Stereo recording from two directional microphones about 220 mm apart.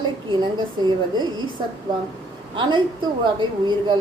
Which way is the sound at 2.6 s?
20° right (ahead or behind).